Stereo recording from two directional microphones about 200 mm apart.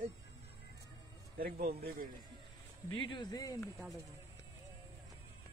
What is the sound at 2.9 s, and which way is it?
Speech, 25° left (ahead or behind).